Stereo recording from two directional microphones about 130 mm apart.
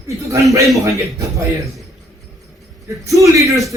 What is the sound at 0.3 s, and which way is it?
Speech, 25° right (ahead or behind).